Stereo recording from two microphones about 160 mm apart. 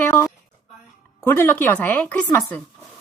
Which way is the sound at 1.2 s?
15° left (ahead or behind).